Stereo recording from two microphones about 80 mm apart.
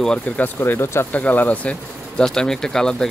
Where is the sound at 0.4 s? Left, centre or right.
Left.